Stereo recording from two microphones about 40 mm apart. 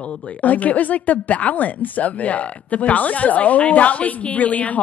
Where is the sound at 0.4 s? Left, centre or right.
Left.